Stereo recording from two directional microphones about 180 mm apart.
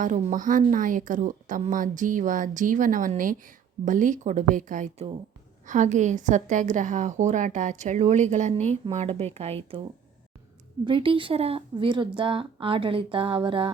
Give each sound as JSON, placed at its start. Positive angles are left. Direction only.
{"t": 0.0, "sound": "a woman's voice", "side_deg": -45}
{"t": 10.8, "sound": "speech", "side_deg": -30}